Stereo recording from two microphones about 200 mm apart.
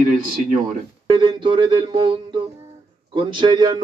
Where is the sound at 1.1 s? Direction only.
25° right (ahead or behind).